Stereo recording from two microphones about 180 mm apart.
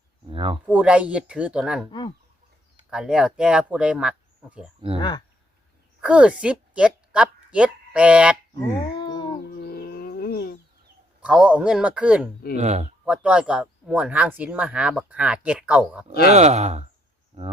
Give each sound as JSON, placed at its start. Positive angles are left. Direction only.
{"t": 0.3, "sound": "a sound", "side_deg": -30}
{"t": 0.6, "sound": "speech", "side_deg": -5}
{"t": 1.9, "sound": "speech", "side_deg": 25}
{"t": 2.9, "sound": "speech", "side_deg": -5}
{"t": 4.9, "sound": "speech", "side_deg": 25}
{"t": 6.0, "sound": "a woman's voice", "side_deg": -5}
{"t": 9.0, "sound": "a sound", "side_deg": 25}
{"t": 9.4, "sound": "a sound", "side_deg": 60}
{"t": 11.2, "sound": "speech", "side_deg": -5}
{"t": 12.5, "sound": "speech", "side_deg": -40}
{"t": 13.1, "sound": "speech", "side_deg": -5}
{"t": 16.3, "sound": "speech", "side_deg": -40}